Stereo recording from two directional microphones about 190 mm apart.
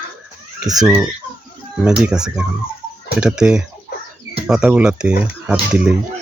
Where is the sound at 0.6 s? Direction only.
20° right (ahead or behind).